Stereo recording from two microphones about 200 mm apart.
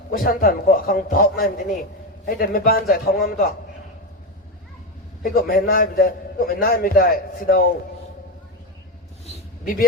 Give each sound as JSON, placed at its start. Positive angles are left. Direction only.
{"t": 0.1, "sound": "a man's voice", "side_deg": 45}
{"t": 5.2, "sound": "a man's voice", "side_deg": 45}